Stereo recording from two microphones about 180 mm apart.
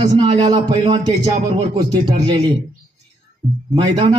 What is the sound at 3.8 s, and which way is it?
Speech, 25° right (ahead or behind).